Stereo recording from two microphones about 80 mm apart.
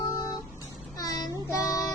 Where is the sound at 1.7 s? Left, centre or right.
Left.